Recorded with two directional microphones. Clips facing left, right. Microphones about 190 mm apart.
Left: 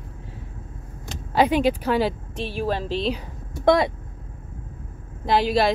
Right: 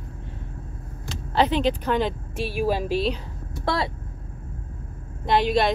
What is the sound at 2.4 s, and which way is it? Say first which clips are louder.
Speech: right 2 dB; 10° right (ahead or behind).